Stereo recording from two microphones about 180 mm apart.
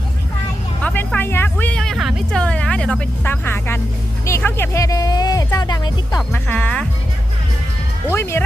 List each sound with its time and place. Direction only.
0.8 s vehicle: 5° left (ahead or behind)
4.3 s music: 15° left (ahead or behind)
8.1 s speech: 15° left (ahead or behind)